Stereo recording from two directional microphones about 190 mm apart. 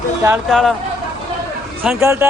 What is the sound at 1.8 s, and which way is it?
Speech, 10° right (ahead or behind).